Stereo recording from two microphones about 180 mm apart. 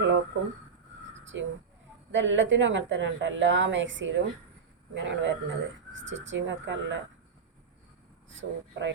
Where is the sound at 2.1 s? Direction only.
90° right.